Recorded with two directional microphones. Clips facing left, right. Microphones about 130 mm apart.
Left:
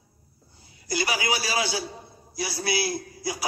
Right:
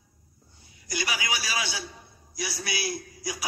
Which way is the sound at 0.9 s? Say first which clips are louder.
Left 5 dB; 35° left (ahead or behind).